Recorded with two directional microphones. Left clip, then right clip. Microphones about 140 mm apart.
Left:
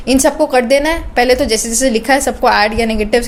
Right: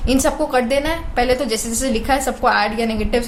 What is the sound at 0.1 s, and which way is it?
A woman's voice, 35° left (ahead or behind).